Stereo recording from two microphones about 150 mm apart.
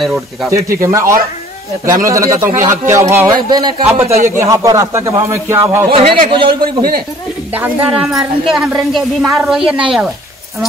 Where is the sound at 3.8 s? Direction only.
15° right (ahead or behind).